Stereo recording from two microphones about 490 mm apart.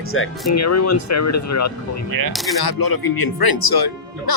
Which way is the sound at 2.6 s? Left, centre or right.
Left.